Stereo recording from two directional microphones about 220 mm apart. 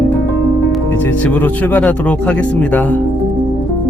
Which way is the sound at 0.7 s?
5° left (ahead or behind).